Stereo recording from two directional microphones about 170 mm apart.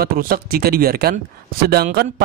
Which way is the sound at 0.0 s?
60° right (ahead or behind).